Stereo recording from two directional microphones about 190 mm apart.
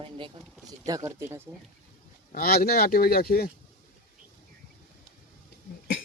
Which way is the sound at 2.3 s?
55° left (ahead or behind).